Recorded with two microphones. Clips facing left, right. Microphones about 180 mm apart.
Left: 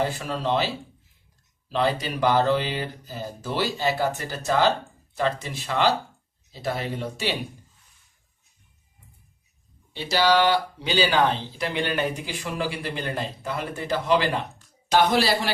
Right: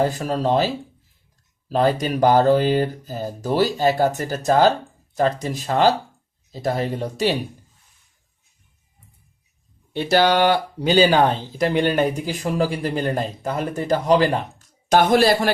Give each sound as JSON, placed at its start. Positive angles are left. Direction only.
{"t": 0.0, "sound": "speech", "side_deg": -40}
{"t": 1.7, "sound": "speech", "side_deg": -45}
{"t": 9.9, "sound": "speech", "side_deg": -55}